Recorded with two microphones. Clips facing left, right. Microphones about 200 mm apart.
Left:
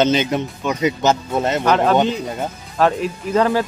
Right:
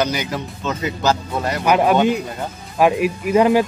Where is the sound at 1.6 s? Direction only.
10° right (ahead or behind).